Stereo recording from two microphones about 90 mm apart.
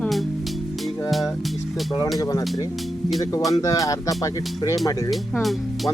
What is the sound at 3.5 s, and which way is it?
Speech, 40° left (ahead or behind).